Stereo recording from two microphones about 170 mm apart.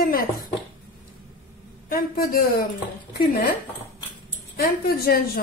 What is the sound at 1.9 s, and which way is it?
A woman's voice, 60° left (ahead or behind).